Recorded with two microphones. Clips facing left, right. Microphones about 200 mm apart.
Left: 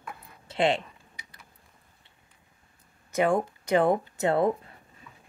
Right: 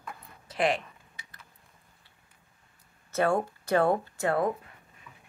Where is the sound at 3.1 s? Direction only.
15° left (ahead or behind).